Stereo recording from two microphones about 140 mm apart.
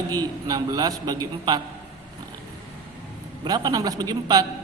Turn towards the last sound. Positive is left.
turn(degrees=-30)  # may be behind; listen again after turning